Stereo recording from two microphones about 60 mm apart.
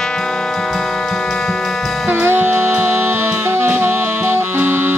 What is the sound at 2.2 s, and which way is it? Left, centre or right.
Music, right.